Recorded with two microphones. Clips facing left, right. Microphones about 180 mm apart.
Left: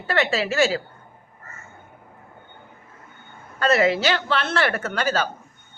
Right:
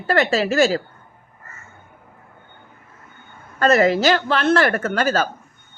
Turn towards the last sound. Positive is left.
turn(degrees=-45)  # may be behind; listen again after turning